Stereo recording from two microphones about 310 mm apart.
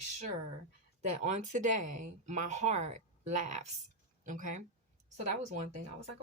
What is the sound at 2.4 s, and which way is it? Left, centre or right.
Speech, right.